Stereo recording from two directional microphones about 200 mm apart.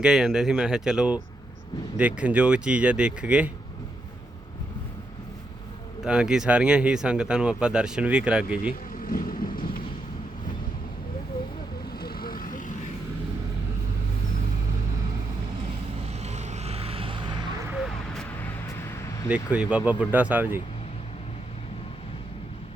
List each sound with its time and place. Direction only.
0.0 s speech: 5° right (ahead or behind)
6.0 s speech: 5° right (ahead or behind)
9.0 s vehicle: 45° left (ahead or behind)
11.9 s vehicle: 50° left (ahead or behind)
16.0 s vehicle: 35° right (ahead or behind)
17.7 s vehicle: 5° right (ahead or behind)
18.3 s vehicle: 10° left (ahead or behind)
19.3 s speech: 5° right (ahead or behind)